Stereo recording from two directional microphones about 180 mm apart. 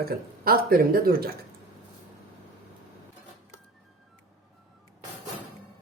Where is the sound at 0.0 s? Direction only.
55° right (ahead or behind).